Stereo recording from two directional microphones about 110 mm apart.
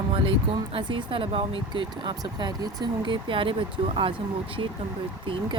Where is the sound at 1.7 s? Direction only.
45° right (ahead or behind).